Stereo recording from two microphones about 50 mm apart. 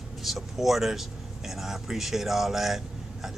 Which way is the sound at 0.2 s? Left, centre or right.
Centre.